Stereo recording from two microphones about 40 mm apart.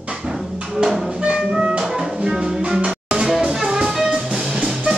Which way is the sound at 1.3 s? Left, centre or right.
Right.